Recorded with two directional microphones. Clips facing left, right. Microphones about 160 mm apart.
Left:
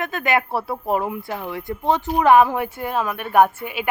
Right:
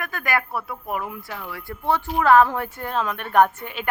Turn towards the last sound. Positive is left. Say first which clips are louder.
# left 2 dB
turn(degrees=10)  # may be behind; listen again after turning